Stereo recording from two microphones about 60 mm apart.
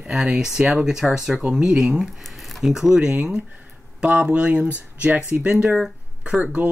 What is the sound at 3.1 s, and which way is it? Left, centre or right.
Speech, centre.